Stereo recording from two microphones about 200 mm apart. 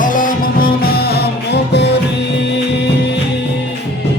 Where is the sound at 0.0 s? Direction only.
45° left (ahead or behind); by 2.0 s 60° left (ahead or behind).